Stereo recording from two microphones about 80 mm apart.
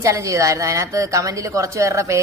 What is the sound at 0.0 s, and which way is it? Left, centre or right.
Speech, right.